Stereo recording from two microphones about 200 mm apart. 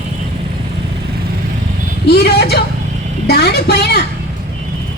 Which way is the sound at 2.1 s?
55° left (ahead or behind).